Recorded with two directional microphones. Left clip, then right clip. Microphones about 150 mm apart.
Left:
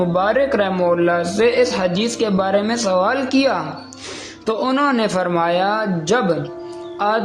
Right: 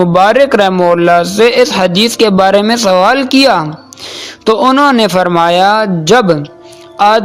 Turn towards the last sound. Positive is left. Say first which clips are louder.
# right 11 dB
turn(degrees=-50)  # may be behind; listen again after turning